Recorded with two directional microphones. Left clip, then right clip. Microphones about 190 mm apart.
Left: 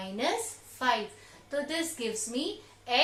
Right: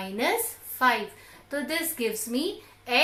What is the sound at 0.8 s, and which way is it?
A woman's voice, 40° right (ahead or behind).